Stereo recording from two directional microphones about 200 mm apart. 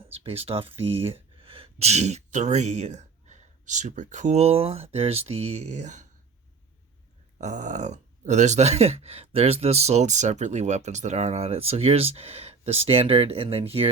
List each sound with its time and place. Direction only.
0.1 s speech: 30° right (ahead or behind)
7.3 s speech: 35° right (ahead or behind)